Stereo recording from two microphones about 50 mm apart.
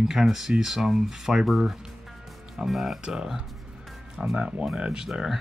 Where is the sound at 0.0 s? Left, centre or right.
Centre.